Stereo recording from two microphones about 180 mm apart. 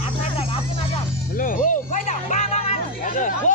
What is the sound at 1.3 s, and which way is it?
Speech, 50° left (ahead or behind).